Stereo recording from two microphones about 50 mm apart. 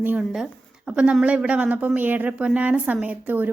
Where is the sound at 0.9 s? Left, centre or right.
Centre.